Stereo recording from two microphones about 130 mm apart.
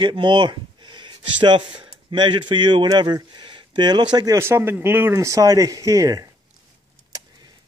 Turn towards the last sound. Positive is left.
turn(degrees=-25)  # may be behind; listen again after turning